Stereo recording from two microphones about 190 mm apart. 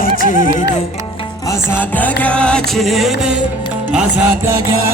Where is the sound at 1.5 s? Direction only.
10° left (ahead or behind).